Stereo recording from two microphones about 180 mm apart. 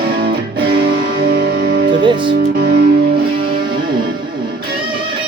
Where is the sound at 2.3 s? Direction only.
55° right (ahead or behind).